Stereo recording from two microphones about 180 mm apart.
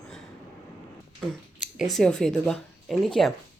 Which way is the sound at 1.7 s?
Centre (ahead or behind).